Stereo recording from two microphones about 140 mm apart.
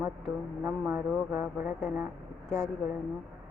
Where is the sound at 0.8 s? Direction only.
5° right (ahead or behind).